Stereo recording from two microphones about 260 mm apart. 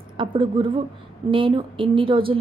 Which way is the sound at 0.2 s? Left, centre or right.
Centre.